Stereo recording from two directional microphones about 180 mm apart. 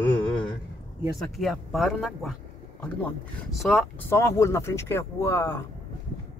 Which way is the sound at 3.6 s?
5° left (ahead or behind).